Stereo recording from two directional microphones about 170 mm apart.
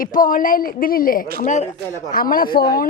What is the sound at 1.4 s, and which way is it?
Speech, 45° left (ahead or behind).